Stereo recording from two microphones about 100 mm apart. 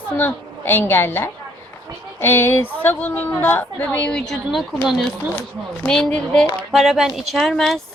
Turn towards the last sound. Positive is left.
turn(degrees=5)  # may be behind; listen again after turning